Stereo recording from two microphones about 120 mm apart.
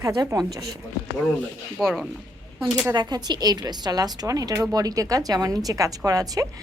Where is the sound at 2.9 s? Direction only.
35° right (ahead or behind).